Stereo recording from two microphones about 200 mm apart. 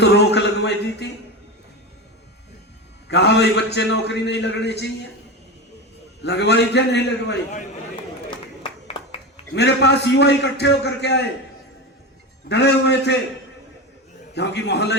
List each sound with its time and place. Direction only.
0.0 s a man's voice: 60° left (ahead or behind)
3.1 s a man's voice: 60° left (ahead or behind)
6.2 s a man's voice: 55° left (ahead or behind)
8.3 s a sound: 25° left (ahead or behind)
9.6 s a man's voice: 60° left (ahead or behind)
12.5 s a man's voice: 60° left (ahead or behind)
14.3 s a man's voice: 55° left (ahead or behind)